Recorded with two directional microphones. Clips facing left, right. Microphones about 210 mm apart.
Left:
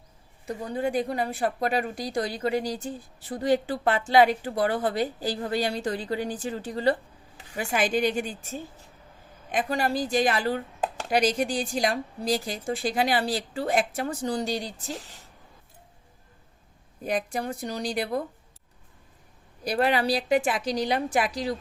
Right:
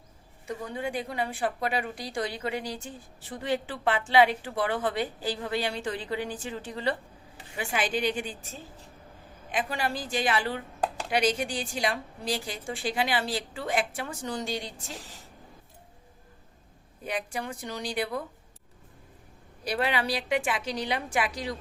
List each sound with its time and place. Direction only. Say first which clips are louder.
0.4 s a woman's voice: left 5 dB; 35° left (ahead or behind)
9.5 s a woman's voice: left 4 dB; 40° left (ahead or behind)
17.0 s a woman's voice: left 5 dB; 40° left (ahead or behind)
19.6 s a woman's voice: left 4 dB; 40° left (ahead or behind)